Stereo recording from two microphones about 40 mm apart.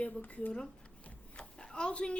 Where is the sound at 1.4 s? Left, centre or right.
Left.